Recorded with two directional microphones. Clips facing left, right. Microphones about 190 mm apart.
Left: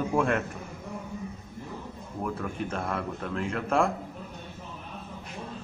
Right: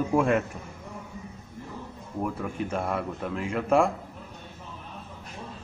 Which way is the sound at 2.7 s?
5° right (ahead or behind).